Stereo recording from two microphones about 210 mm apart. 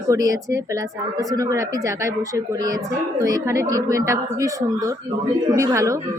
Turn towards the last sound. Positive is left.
turn(degrees=-15)  # may be behind; listen again after turning